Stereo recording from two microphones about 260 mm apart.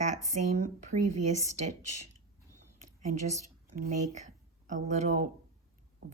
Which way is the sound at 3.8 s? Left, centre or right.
Right.